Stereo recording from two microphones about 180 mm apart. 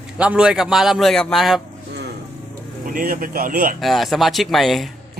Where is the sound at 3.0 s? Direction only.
50° right (ahead or behind).